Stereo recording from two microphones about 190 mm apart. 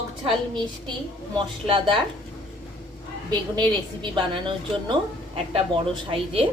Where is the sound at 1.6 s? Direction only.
25° right (ahead or behind).